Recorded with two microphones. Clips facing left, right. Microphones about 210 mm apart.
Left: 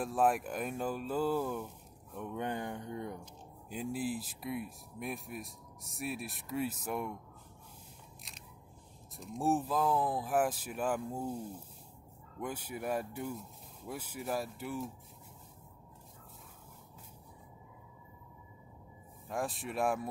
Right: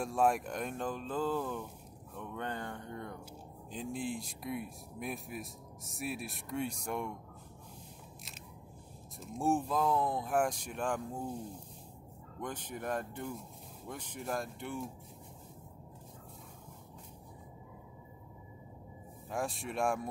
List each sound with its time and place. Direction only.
0.0 s speech: centre (ahead or behind)
9.2 s speech: centre (ahead or behind)
12.4 s speech: 10° left (ahead or behind)
19.2 s speech: centre (ahead or behind)